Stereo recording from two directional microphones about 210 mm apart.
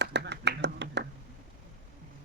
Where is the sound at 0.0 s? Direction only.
55° right (ahead or behind).